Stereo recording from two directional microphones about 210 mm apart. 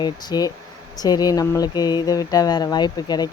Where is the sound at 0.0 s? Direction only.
20° left (ahead or behind).